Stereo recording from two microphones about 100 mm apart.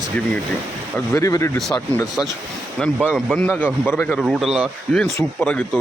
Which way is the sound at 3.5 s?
20° left (ahead or behind).